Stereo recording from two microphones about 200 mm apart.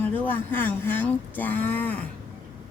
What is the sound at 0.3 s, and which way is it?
Speech, 10° left (ahead or behind).